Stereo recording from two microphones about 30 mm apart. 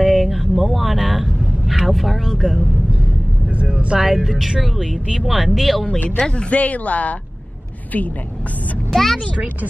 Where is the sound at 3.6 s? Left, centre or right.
Right.